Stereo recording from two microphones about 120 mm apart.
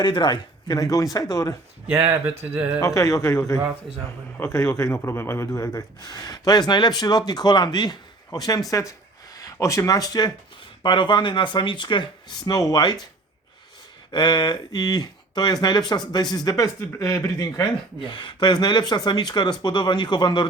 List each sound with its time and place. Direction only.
0.0 s speech: 40° left (ahead or behind)
2.5 s speech: 15° right (ahead or behind)
2.8 s speech: 25° left (ahead or behind)
10.8 s speech: 40° left (ahead or behind)
14.1 s speech: 35° left (ahead or behind)
18.1 s speech: 40° left (ahead or behind)